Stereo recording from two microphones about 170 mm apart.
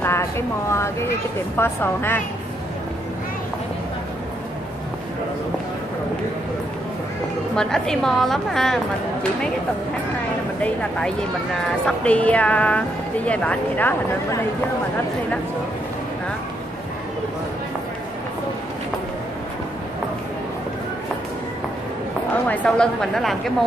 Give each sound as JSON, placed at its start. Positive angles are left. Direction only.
{"t": 0.0, "sound": "a sound", "side_deg": 15}
{"t": 1.6, "sound": "a woman's voice", "side_deg": 15}
{"t": 7.5, "sound": "a woman's voice", "side_deg": 5}
{"t": 10.6, "sound": "a woman's voice", "side_deg": 5}
{"t": 22.3, "sound": "a woman's voice", "side_deg": 10}